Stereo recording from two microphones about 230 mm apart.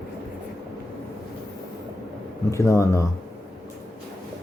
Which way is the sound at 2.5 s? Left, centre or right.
Centre.